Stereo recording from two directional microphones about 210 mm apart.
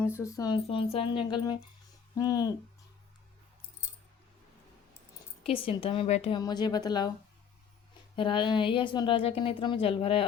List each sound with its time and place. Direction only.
0.1 s a woman's voice: 15° left (ahead or behind)
5.4 s a woman's voice: 25° left (ahead or behind)
6.4 s a woman's voice: 20° left (ahead or behind)
8.1 s a woman's voice: 25° left (ahead or behind)